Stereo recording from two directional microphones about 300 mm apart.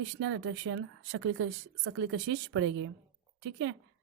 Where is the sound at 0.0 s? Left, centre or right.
Right.